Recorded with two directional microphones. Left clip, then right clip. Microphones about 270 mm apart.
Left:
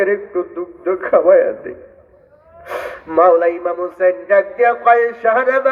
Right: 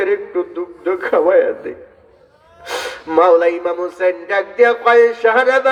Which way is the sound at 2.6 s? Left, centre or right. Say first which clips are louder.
Right 2 dB; right.